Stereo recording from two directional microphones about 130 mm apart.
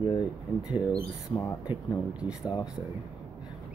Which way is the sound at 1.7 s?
15° right (ahead or behind).